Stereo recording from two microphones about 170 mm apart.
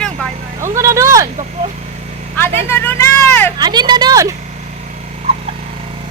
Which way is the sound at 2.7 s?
15° left (ahead or behind).